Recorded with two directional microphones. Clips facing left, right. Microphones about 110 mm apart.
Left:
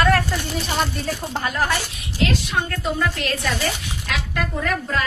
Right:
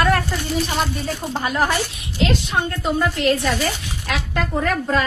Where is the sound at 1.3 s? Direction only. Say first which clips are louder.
Right 3 dB; 15° right (ahead or behind).